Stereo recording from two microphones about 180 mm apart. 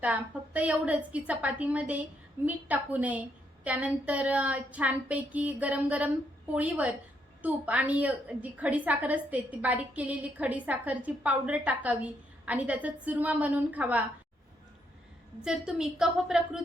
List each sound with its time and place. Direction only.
0.0 s a woman's voice: 10° right (ahead or behind)
15.4 s a woman's voice: 5° right (ahead or behind)